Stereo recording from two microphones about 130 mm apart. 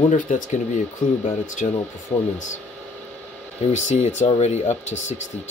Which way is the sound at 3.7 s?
60° left (ahead or behind).